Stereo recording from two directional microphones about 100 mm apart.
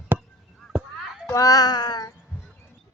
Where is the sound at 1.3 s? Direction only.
35° left (ahead or behind).